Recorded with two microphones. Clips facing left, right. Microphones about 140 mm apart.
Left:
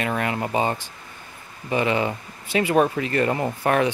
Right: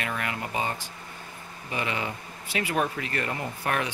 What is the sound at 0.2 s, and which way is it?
Speech, 35° left (ahead or behind).